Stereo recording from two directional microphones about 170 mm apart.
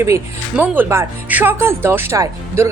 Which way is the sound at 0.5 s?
10° right (ahead or behind).